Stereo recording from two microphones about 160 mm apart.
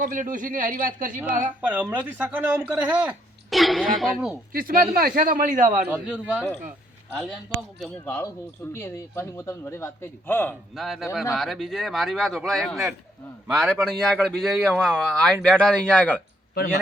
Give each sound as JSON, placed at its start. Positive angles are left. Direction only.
{"t": 0.0, "sound": "speech", "side_deg": -55}
{"t": 1.6, "sound": "speech", "side_deg": -10}
{"t": 4.5, "sound": "speech", "side_deg": -60}
{"t": 5.8, "sound": "speech", "side_deg": -10}
{"t": 8.0, "sound": "a man's voice", "side_deg": 15}
{"t": 10.8, "sound": "speech", "side_deg": 0}